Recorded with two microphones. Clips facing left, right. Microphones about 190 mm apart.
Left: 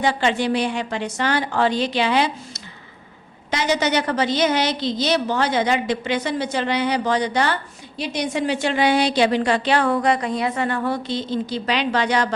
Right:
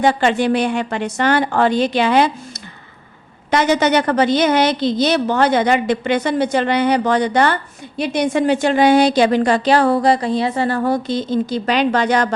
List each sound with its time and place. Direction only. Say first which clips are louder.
0.0 s a woman's voice: right 5 dB; 50° right (ahead or behind)